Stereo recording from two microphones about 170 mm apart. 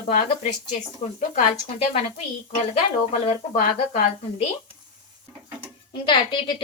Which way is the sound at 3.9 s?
45° left (ahead or behind).